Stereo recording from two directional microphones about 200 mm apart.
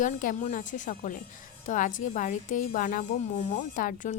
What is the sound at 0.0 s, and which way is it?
Speech, 40° left (ahead or behind).